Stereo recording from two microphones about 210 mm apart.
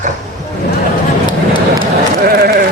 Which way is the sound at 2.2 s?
45° right (ahead or behind).